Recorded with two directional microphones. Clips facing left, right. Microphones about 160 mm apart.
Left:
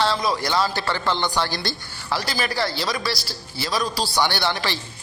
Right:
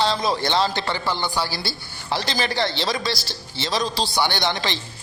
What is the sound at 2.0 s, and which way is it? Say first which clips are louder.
A man's voice: right 1 dB; 25° right (ahead or behind).